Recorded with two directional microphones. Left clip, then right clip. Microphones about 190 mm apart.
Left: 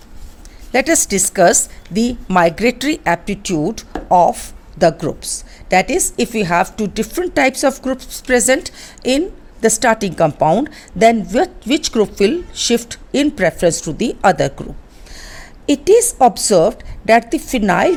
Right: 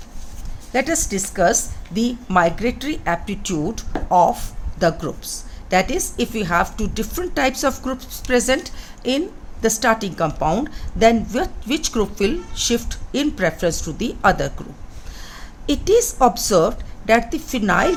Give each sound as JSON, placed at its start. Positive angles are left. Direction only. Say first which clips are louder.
{"t": 0.7, "sound": "a woman's voice", "louder": "left 6 dB", "side_deg": 50}